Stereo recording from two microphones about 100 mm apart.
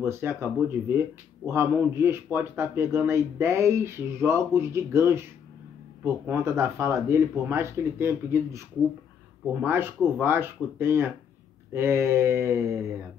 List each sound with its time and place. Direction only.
0.0 s speech: 25° right (ahead or behind)